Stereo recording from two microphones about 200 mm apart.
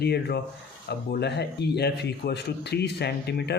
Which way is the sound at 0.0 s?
55° left (ahead or behind).